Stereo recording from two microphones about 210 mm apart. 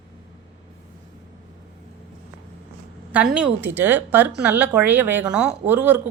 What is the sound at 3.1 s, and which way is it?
A woman's voice, 5° right (ahead or behind).